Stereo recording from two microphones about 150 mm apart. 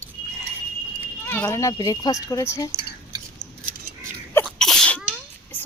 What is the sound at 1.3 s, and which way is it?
A woman's voice, 20° left (ahead or behind).